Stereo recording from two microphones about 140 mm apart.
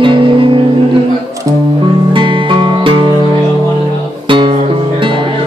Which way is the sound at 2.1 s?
35° right (ahead or behind).